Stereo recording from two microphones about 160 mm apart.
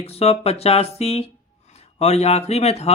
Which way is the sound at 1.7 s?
40° left (ahead or behind).